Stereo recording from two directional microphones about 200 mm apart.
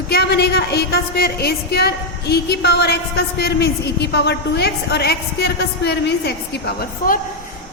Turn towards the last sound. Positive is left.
turn(degrees=55)  # may be behind; listen again after turning